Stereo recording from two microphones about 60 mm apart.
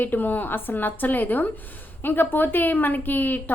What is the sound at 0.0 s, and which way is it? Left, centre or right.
A woman's voice, left.